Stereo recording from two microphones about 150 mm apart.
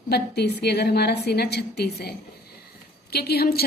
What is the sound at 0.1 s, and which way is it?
A woman's voice, 90° left.